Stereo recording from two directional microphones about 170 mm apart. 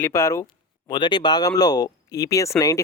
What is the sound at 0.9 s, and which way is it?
Speech, 25° left (ahead or behind).